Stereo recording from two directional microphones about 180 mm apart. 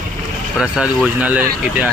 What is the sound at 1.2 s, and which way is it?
Speech, 10° right (ahead or behind).